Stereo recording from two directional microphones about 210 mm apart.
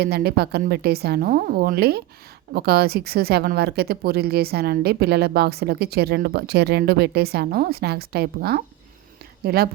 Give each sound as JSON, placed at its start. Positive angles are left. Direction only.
{"t": 0.0, "sound": "speech", "side_deg": -50}